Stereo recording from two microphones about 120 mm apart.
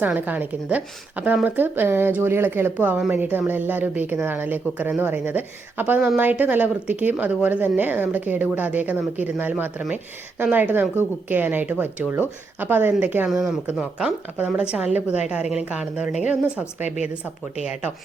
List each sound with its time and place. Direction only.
0.0 s speech: 15° right (ahead or behind)
13.3 s speech: centre (ahead or behind)
17.6 s speech: 10° right (ahead or behind)